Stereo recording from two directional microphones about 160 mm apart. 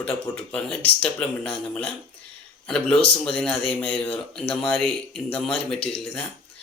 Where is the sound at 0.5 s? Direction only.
5° left (ahead or behind).